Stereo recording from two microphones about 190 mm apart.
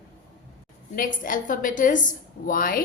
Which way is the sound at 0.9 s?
45° left (ahead or behind).